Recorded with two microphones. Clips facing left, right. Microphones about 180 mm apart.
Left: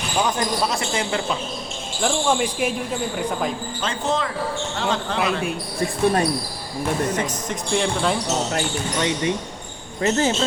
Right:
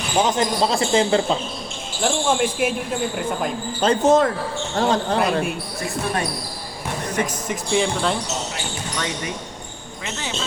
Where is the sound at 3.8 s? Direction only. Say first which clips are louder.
Right 9 dB; 40° right (ahead or behind).